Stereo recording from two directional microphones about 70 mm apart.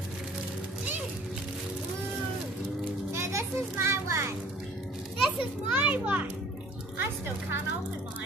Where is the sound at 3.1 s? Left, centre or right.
Right.